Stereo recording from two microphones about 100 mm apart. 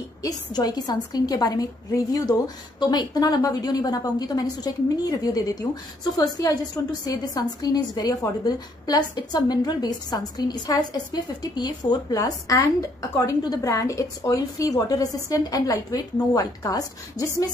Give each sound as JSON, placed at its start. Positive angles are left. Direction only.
{"t": 0.2, "sound": "a woman's voice", "side_deg": 40}